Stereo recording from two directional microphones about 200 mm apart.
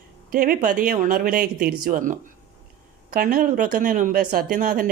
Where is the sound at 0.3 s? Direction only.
45° right (ahead or behind).